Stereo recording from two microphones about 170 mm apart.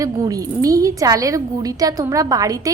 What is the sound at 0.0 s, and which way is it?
A woman's voice, 20° right (ahead or behind).